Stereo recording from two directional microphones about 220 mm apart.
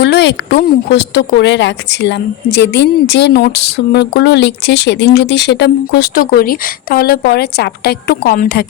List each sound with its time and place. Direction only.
0.0 s a woman's voice: 50° left (ahead or behind)